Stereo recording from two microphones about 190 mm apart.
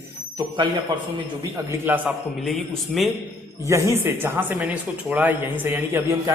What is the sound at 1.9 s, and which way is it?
A man's voice, centre (ahead or behind).